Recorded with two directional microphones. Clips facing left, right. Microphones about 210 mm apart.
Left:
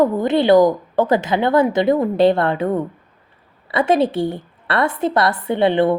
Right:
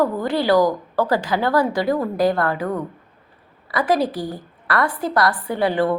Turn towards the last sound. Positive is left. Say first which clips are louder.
# left 4 dB
turn(degrees=25)  # may be behind; listen again after turning